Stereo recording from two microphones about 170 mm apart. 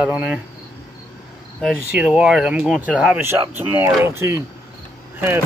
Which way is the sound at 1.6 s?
5° right (ahead or behind).